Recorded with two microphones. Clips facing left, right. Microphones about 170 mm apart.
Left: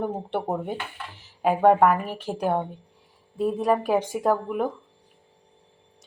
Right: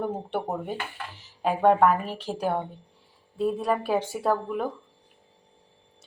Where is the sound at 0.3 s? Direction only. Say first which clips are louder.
Left 2 dB; 15° left (ahead or behind).